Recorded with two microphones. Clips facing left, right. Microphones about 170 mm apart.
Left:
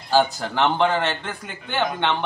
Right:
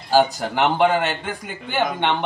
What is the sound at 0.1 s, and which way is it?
Speech, 15° right (ahead or behind).